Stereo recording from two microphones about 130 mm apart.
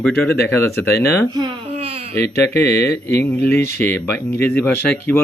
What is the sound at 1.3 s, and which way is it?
Speech, 35° right (ahead or behind).